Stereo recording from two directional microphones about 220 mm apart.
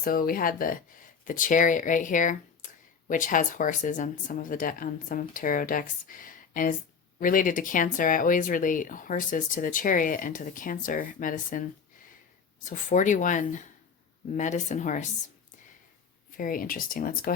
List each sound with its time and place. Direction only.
0.0 s speech: 40° left (ahead or behind)
16.4 s speech: 40° left (ahead or behind)